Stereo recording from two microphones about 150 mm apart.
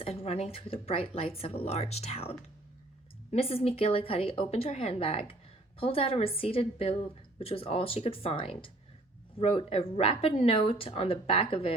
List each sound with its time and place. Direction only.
0.0 s a woman's voice: 40° left (ahead or behind)
3.3 s a woman's voice: 40° left (ahead or behind)